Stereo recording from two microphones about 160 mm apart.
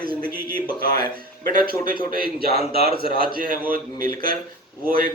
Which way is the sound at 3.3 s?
65° right (ahead or behind).